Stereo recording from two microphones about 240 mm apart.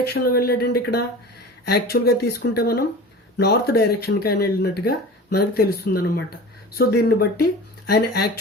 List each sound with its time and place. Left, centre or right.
0.0 s speech: left